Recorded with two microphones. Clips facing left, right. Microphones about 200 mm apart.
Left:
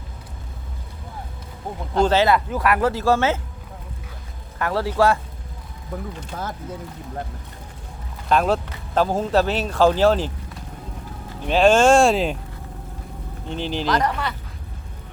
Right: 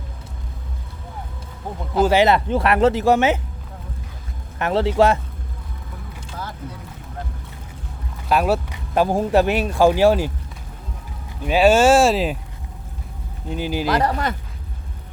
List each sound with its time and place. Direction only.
1.9 s speech: 10° right (ahead or behind)
2.2 s speech: 25° right (ahead or behind)
4.5 s speech: 20° right (ahead or behind)
6.3 s speech: 50° left (ahead or behind)
8.3 s speech: 5° right (ahead or behind)
11.4 s speech: 5° right (ahead or behind)
13.5 s speech: 10° right (ahead or behind)
14.0 s speech: 40° right (ahead or behind)